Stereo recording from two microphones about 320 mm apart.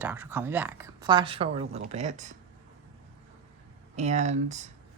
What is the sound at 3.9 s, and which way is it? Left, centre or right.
Speech, right.